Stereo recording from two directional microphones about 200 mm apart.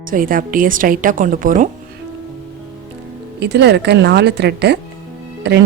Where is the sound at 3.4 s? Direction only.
55° right (ahead or behind).